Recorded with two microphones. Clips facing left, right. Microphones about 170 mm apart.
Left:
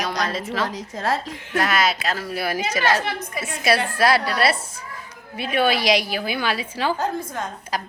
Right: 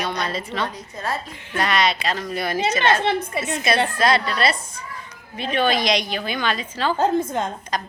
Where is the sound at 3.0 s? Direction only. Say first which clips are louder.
Right 5 dB; 30° right (ahead or behind).